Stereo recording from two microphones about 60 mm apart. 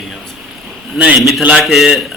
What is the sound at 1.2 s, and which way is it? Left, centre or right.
Speech, centre.